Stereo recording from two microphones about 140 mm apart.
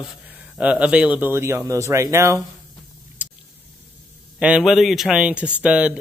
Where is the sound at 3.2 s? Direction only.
10° right (ahead or behind).